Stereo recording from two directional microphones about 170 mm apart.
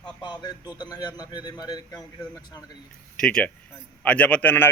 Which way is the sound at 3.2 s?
5° left (ahead or behind).